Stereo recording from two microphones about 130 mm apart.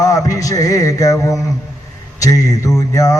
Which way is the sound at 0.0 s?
25° left (ahead or behind).